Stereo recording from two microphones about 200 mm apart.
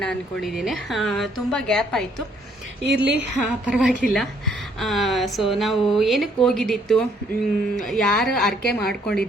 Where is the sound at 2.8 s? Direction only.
60° right (ahead or behind).